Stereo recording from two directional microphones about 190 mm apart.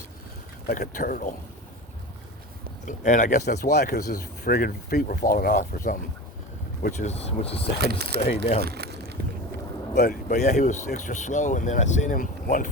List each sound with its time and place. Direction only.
0.7 s speech: 50° left (ahead or behind)
2.8 s speech: 40° left (ahead or behind)
3.4 s speech: 60° left (ahead or behind); by 7.6 s 35° left (ahead or behind)
7.8 s speech: 55° right (ahead or behind)
8.6 s a sound: 55° right (ahead or behind)
10.0 s speech: 45° left (ahead or behind)